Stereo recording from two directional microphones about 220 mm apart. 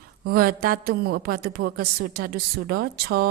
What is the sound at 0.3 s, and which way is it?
A woman's voice, 45° right (ahead or behind).